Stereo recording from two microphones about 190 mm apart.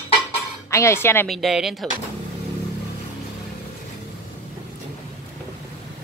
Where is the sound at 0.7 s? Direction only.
15° left (ahead or behind).